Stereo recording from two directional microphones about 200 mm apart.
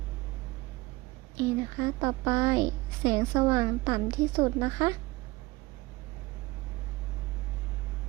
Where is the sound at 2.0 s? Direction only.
20° right (ahead or behind).